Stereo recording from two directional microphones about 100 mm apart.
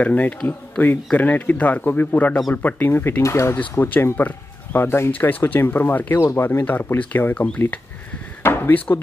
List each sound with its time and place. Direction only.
0.0 s speech: 15° left (ahead or behind)